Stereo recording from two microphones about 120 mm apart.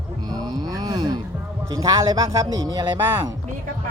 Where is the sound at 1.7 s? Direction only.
30° right (ahead or behind).